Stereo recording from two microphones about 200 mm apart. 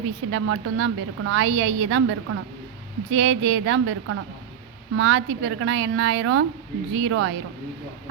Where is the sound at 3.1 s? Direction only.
70° right (ahead or behind); by 7.3 s 85° right.